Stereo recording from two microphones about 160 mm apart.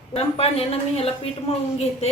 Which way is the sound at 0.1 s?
40° left (ahead or behind).